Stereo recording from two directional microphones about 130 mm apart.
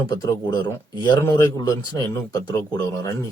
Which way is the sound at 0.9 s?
35° left (ahead or behind).